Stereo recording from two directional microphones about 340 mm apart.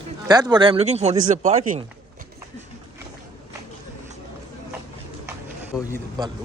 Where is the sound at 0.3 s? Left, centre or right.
Centre.